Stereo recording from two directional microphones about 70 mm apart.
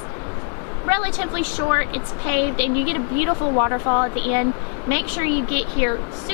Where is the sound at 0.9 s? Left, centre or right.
Centre.